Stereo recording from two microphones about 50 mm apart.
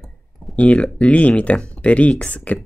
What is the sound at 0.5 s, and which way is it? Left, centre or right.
Speech, left.